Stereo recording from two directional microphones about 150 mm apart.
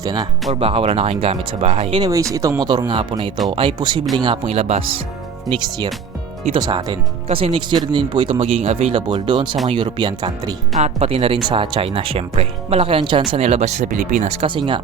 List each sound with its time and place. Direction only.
0.0 s speech: 25° right (ahead or behind)
0.5 s a man's voice: 40° right (ahead or behind)
2.0 s a man's voice: 20° right (ahead or behind); by 4.8 s 45° right (ahead or behind)
6.5 s a man's voice: 30° right (ahead or behind)
10.8 s a man's voice: 45° right (ahead or behind)
14.4 s a man's voice: 30° right (ahead or behind)